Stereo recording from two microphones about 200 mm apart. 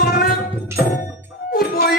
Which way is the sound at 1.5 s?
50° left (ahead or behind).